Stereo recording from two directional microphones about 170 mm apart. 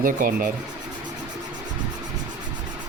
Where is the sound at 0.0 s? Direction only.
55° right (ahead or behind).